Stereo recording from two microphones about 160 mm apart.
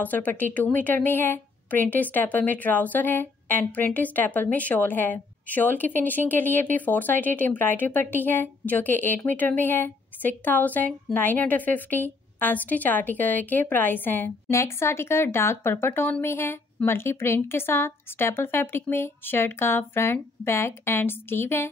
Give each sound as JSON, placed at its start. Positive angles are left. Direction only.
{"t": 0.0, "sound": "a woman's voice", "side_deg": 10}